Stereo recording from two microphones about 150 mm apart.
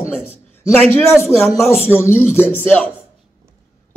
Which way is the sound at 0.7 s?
10° left (ahead or behind).